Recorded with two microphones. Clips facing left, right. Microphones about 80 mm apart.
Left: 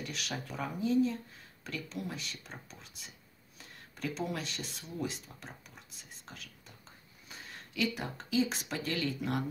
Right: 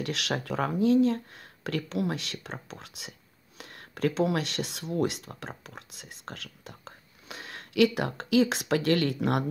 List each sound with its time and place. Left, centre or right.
0.0 s speech: right
3.5 s speech: right